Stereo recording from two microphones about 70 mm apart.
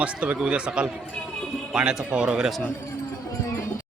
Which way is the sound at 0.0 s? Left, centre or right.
Centre.